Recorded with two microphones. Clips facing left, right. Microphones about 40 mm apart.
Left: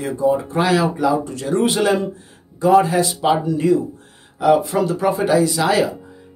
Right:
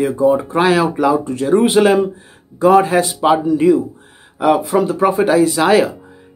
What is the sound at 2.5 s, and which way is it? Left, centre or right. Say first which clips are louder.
Speech: right 3 dB; right.